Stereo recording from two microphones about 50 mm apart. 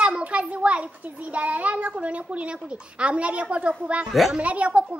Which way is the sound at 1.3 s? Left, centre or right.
Right.